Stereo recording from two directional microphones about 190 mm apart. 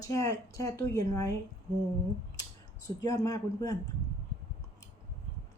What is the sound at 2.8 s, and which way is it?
Speech, 20° left (ahead or behind).